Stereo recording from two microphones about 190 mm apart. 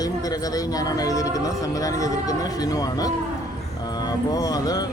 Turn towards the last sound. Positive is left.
turn(degrees=20)  # may be behind; listen again after turning